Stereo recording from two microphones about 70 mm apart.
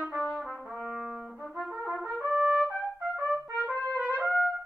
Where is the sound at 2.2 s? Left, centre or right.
Centre.